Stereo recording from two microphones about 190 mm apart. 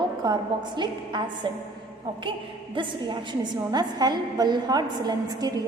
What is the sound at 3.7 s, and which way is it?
A woman's voice, 20° right (ahead or behind).